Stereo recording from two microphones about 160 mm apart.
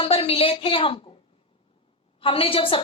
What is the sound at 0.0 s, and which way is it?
A woman's voice, 35° left (ahead or behind).